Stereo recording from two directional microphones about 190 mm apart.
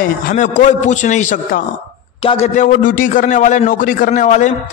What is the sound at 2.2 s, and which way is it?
Speech, 30° left (ahead or behind).